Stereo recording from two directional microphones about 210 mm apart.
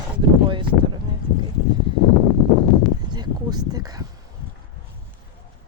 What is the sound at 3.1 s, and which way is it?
Speech, 20° right (ahead or behind).